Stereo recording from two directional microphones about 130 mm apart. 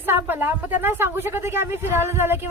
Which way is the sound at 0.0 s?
15° right (ahead or behind).